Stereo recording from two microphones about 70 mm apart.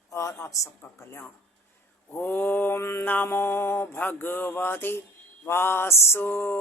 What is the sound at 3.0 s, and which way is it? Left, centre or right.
Speech, left.